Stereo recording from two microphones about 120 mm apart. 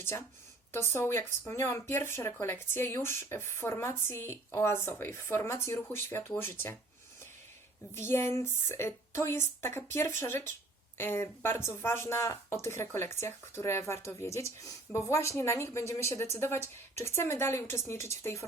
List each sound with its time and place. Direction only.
0.0 s speech: 25° left (ahead or behind)
7.9 s speech: 20° left (ahead or behind)